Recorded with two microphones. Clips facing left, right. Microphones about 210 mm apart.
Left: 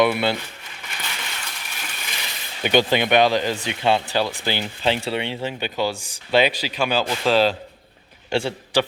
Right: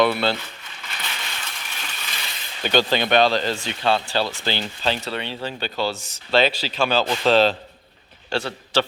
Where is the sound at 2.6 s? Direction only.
15° left (ahead or behind).